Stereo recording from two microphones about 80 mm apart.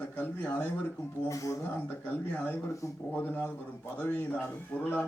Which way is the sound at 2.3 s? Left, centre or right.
Centre.